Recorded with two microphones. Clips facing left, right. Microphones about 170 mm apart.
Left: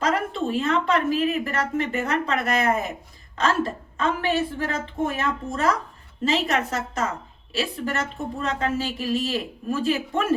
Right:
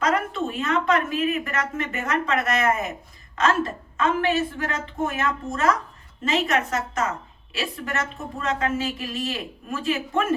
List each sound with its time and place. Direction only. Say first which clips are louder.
0.0 s a woman's voice: even; 35° left (ahead or behind)
3.9 s a woman's voice: right 2 dB; 35° left (ahead or behind)